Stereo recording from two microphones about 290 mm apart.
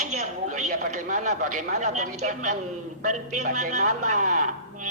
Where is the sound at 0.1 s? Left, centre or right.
Right.